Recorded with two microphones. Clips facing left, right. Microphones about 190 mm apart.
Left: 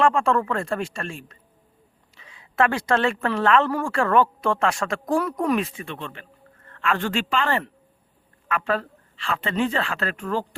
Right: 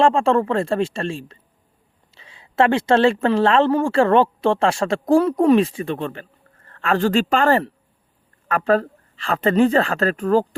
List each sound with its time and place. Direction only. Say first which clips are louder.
0.0 s a woman's voice: right 4 dB; 25° right (ahead or behind)